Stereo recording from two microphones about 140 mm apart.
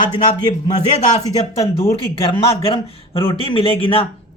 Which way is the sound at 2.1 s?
40° left (ahead or behind).